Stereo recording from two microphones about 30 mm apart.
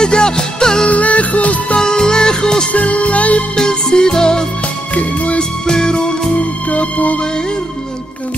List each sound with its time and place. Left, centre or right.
0.0 s music: left
0.8 s music: left
1.8 s music: left
2.7 s music: left
3.5 s music: left
4.9 s music: left
5.4 s music: centre
6.7 s music: left